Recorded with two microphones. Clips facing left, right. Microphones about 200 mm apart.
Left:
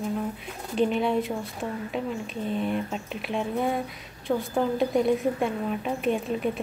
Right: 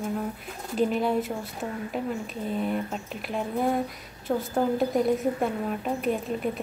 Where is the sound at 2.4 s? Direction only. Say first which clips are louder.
Even; 5° right (ahead or behind).